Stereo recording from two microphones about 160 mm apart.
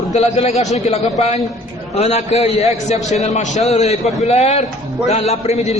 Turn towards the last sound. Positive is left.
turn(degrees=40)  # may be behind; listen again after turning